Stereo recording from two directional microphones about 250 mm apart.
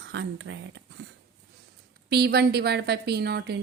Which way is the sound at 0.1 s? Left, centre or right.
Right.